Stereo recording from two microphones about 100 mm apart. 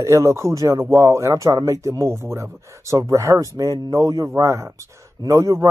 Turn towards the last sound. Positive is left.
turn(degrees=-30)  # may be behind; listen again after turning